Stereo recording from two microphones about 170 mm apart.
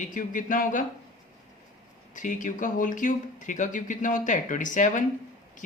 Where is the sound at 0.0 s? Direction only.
50° left (ahead or behind).